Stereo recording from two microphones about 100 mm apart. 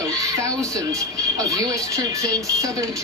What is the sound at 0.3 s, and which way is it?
Speech, 30° right (ahead or behind).